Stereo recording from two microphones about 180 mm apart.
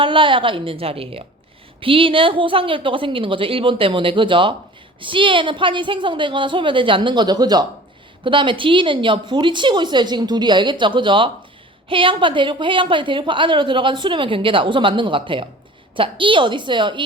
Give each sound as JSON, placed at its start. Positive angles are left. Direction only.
{"t": 0.0, "sound": "a woman's voice", "side_deg": -30}